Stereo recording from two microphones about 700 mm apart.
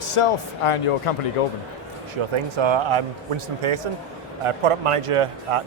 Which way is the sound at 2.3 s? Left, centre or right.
Right.